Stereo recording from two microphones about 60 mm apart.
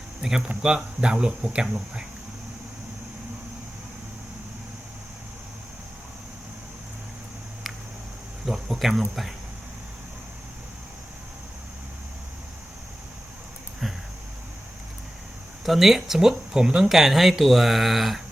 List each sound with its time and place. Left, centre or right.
0.2 s speech: centre
8.4 s speech: centre
15.6 s speech: centre